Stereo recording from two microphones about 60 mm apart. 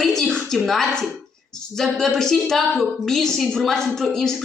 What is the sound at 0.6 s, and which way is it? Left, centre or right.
A woman's voice, centre.